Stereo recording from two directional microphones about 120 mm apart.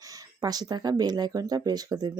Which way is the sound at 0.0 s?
30° right (ahead or behind).